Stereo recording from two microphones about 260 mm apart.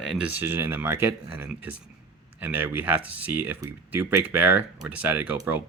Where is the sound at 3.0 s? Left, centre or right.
Left.